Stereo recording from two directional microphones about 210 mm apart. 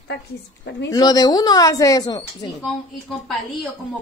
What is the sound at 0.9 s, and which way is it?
A woman's voice, 15° left (ahead or behind).